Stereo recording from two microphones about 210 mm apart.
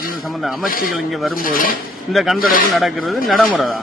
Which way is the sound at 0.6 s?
40° left (ahead or behind).